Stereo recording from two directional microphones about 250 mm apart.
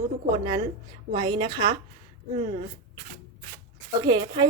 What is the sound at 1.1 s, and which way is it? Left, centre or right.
Speech, centre.